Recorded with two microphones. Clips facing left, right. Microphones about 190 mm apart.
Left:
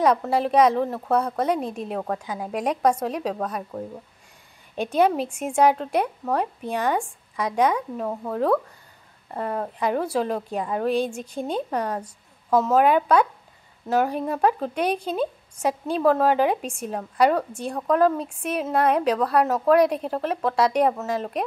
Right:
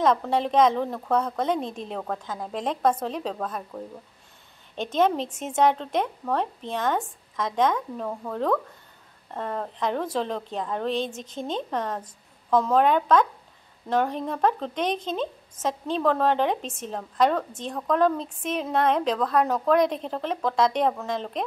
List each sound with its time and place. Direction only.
0.0 s speech: 10° left (ahead or behind)